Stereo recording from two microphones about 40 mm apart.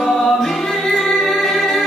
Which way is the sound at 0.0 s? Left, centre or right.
Centre.